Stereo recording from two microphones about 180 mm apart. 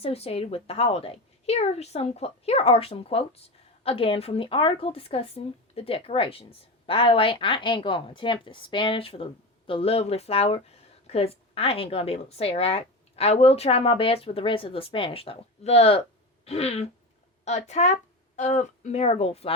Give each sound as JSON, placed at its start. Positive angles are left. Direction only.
{"t": 0.0, "sound": "a woman's voice", "side_deg": 35}